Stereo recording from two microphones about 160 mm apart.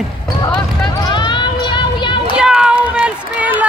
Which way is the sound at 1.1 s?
30° left (ahead or behind).